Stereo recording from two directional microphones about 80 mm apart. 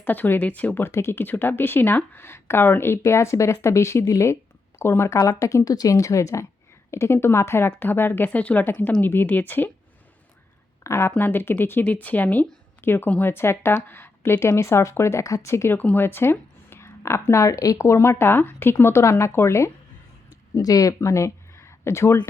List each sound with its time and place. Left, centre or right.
0.0 s a woman's voice: left
10.8 s a woman's voice: left
20.6 s speech: left